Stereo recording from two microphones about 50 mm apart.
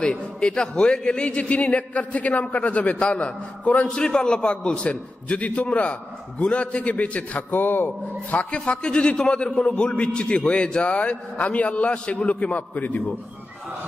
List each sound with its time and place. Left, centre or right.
0.0 s a man's voice: centre
3.8 s a man's voice: centre; by 7.4 s left
7.5 s speech: left
8.3 s a man's voice: left